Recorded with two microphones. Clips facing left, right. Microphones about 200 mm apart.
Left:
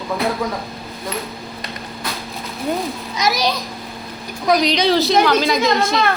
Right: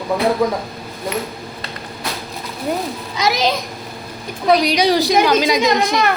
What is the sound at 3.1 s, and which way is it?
Speech, 25° right (ahead or behind).